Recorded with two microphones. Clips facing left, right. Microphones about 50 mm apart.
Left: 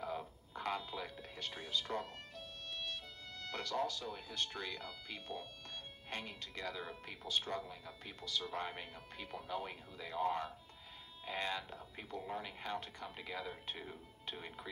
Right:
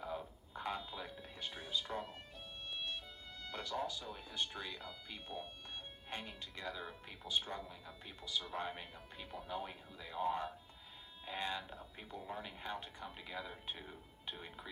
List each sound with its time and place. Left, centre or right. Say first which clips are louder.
0.5 s a sound: left 2 dB; centre
1.6 s music: left 2 dB; centre
3.4 s speech: left 2 dB; centre